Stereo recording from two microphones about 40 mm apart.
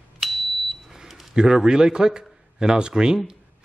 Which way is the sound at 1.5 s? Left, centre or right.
Centre.